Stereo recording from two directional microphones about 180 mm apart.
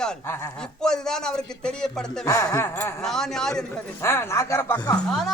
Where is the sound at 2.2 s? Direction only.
20° left (ahead or behind).